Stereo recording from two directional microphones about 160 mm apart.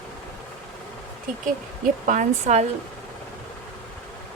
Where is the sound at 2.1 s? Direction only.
50° right (ahead or behind).